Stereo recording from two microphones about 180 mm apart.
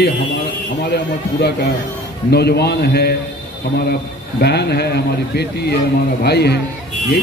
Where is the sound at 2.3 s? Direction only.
65° left (ahead or behind).